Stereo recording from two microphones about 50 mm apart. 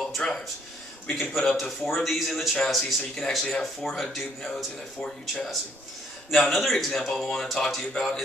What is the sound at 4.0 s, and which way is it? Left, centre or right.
Speech, centre.